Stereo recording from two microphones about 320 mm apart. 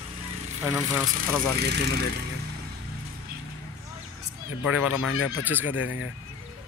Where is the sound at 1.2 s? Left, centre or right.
Right.